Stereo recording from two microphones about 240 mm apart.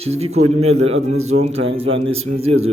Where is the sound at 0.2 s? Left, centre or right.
Right.